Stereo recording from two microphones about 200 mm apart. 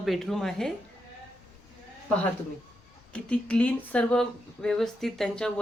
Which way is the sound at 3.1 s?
5° left (ahead or behind).